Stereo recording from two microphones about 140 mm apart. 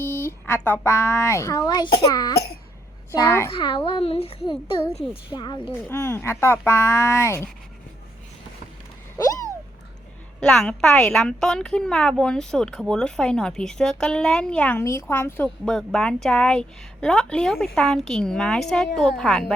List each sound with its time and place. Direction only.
0.0 s a woman's voice: 15° left (ahead or behind); by 2.3 s 30° left (ahead or behind)
3.1 s speech: 20° left (ahead or behind)
3.5 s speech: 35° left (ahead or behind)
5.8 s a woman's voice: 20° left (ahead or behind)
9.1 s a sound: 25° left (ahead or behind)
10.4 s a woman's voice: 5° left (ahead or behind)
14.8 s a woman's voice: 20° left (ahead or behind)
15.4 s a woman's voice: 5° left (ahead or behind)